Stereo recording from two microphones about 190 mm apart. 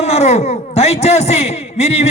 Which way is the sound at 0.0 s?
35° left (ahead or behind).